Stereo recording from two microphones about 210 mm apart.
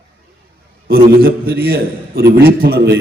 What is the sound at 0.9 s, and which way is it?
A man's voice, 45° right (ahead or behind).